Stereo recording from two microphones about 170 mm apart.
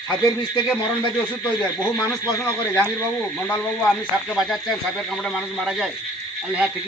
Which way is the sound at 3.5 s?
5° left (ahead or behind).